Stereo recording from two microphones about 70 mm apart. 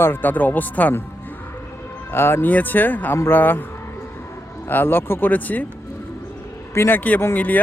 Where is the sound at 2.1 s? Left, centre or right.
Left.